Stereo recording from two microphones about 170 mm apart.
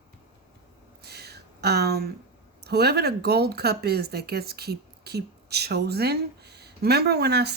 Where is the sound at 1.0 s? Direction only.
70° right (ahead or behind).